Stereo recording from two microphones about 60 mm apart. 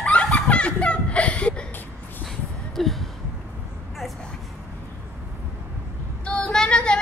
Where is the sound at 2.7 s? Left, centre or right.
Centre.